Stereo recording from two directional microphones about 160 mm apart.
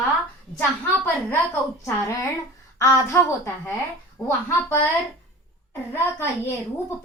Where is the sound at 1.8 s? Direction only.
20° left (ahead or behind).